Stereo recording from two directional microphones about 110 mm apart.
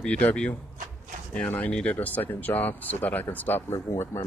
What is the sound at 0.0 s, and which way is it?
Speech, 10° left (ahead or behind).